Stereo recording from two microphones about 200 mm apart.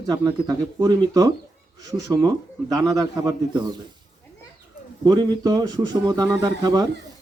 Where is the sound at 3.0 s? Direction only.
20° right (ahead or behind).